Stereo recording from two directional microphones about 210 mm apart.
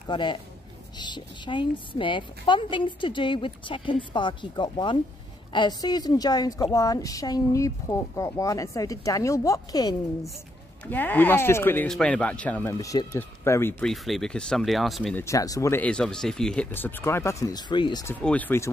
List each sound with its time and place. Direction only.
0.1 s a woman's voice: 20° left (ahead or behind); by 15.2 s centre (ahead or behind)
15.2 s a woman's voice: 15° left (ahead or behind)
18.2 s a woman's voice: 5° left (ahead or behind)